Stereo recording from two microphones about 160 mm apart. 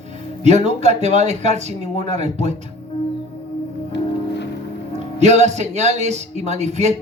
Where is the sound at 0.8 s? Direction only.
45° right (ahead or behind).